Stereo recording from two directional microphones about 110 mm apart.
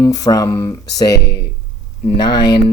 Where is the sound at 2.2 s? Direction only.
40° left (ahead or behind).